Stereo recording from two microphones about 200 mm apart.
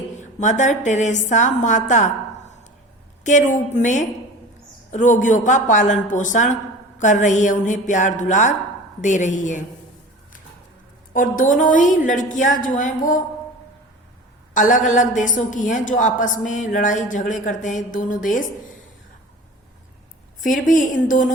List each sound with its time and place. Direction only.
0.2 s a woman's voice: 40° left (ahead or behind)
11.1 s a woman's voice: 40° left (ahead or behind)
14.5 s a woman's voice: 40° left (ahead or behind)
20.4 s a woman's voice: 40° left (ahead or behind)